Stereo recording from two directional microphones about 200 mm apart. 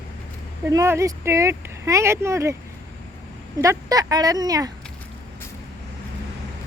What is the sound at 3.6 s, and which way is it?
Speech, 15° right (ahead or behind).